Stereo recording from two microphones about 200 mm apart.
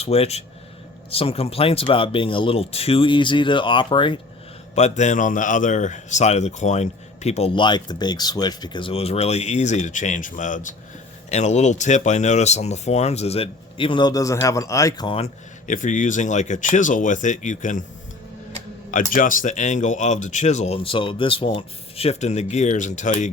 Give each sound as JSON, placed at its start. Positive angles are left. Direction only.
{"t": 0.0, "sound": "speech", "side_deg": 30}
{"t": 4.7, "sound": "speech", "side_deg": 35}
{"t": 18.9, "sound": "speech", "side_deg": 45}